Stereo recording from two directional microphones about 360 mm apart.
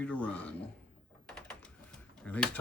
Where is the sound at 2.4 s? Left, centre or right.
Centre.